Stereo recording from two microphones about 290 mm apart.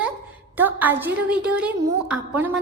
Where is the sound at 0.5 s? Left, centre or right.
Centre.